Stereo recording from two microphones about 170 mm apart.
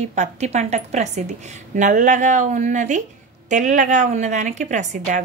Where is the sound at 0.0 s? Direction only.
45° right (ahead or behind).